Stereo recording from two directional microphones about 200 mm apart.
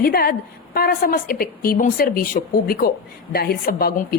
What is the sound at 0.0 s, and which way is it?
A woman's voice, 50° left (ahead or behind).